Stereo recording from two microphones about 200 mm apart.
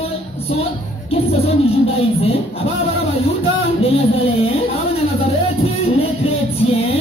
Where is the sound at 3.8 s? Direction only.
30° left (ahead or behind).